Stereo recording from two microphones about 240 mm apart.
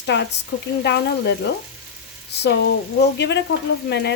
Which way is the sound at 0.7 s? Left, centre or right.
Left.